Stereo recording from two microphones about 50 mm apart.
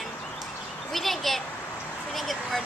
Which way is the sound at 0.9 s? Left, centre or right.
Centre.